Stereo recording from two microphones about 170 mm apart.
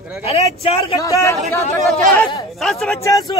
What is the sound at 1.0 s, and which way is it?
Speech, 20° left (ahead or behind).